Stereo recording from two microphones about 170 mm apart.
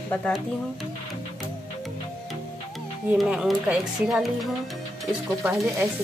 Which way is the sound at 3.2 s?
Centre (ahead or behind).